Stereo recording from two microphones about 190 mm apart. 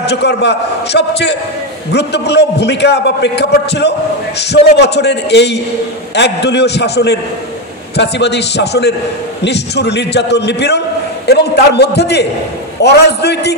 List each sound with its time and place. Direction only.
0.0 s a man's voice: 60° left (ahead or behind)